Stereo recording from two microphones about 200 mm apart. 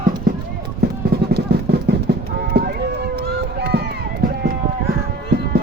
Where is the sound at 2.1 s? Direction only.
50° right (ahead or behind).